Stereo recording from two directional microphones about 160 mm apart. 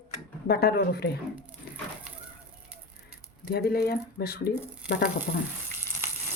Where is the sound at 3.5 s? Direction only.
70° left (ahead or behind).